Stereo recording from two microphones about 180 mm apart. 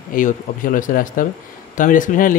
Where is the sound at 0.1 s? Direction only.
45° left (ahead or behind).